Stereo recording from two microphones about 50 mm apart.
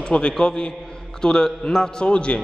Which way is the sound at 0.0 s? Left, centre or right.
Centre.